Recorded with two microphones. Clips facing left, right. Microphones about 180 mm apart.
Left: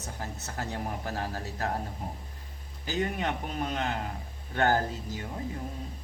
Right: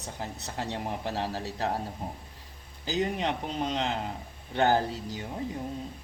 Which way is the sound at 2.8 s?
25° right (ahead or behind).